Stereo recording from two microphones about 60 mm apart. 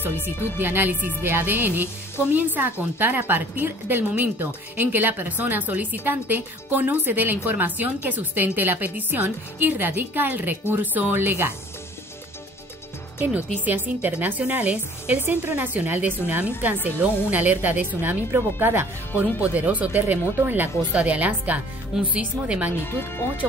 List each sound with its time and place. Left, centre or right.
0.6 s a woman's voice: right
13.2 s speech: right
22.8 s speech: left